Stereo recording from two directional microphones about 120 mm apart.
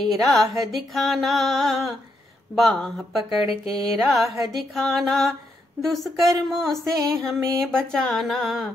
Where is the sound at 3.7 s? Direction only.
30° right (ahead or behind).